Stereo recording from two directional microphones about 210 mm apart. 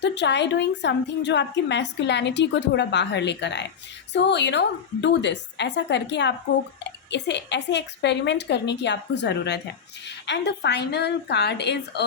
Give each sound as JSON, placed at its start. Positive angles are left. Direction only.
{"t": 0.0, "sound": "a woman's voice", "side_deg": 55}